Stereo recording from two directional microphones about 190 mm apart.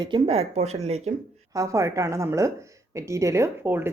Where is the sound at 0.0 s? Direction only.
30° right (ahead or behind).